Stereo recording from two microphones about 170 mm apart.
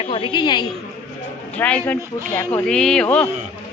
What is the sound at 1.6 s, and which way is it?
A man's voice, 10° left (ahead or behind).